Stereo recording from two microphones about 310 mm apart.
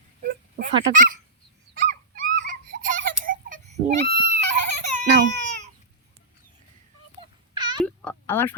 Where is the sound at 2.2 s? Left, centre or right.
Right.